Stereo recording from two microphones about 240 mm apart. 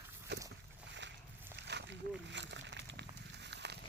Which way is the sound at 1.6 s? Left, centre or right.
Right.